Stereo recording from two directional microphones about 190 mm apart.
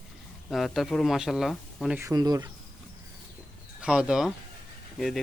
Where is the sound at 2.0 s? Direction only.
15° right (ahead or behind).